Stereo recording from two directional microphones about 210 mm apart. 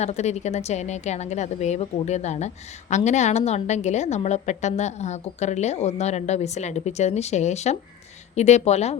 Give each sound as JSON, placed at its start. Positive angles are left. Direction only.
{"t": 0.0, "sound": "a woman's voice", "side_deg": 30}